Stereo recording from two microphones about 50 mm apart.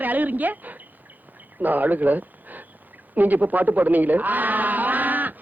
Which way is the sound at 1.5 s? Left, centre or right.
Right.